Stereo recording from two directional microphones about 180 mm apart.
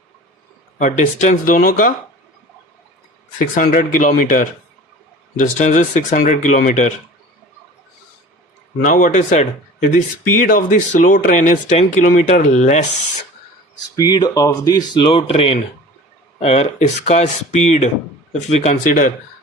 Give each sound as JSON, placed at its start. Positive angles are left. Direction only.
{"t": 0.8, "sound": "speech", "side_deg": 45}
{"t": 3.3, "sound": "speech", "side_deg": 50}
{"t": 8.8, "sound": "speech", "side_deg": 45}
{"t": 13.9, "sound": "speech", "side_deg": 20}